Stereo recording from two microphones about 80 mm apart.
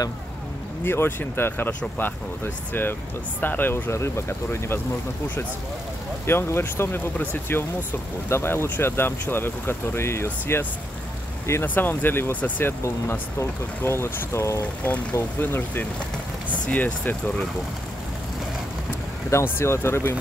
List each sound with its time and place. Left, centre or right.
0.8 s speech: left
6.2 s speech: left
13.4 s speech: left
14.8 s speech: centre
19.3 s speech: left